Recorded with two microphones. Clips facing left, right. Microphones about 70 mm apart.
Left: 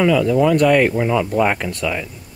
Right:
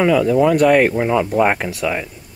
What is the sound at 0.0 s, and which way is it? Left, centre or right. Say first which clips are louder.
Speech: right 1 dB; centre.